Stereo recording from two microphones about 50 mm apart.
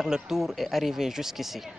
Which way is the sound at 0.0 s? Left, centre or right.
Centre.